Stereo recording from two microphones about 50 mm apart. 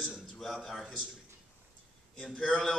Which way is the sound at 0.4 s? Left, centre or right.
Centre.